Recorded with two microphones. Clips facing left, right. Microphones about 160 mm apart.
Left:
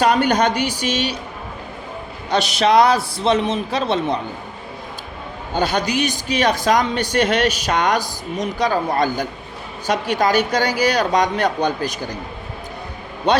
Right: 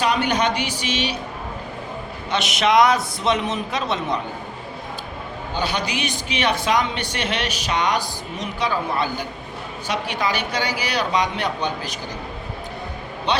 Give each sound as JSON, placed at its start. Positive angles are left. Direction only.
{"t": 0.0, "sound": "speech", "side_deg": 45}
{"t": 2.3, "sound": "a man's voice", "side_deg": 35}
{"t": 5.5, "sound": "speech", "side_deg": 45}